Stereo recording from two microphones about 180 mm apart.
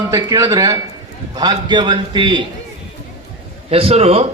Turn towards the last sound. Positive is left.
turn(degrees=-35)  # may be behind; listen again after turning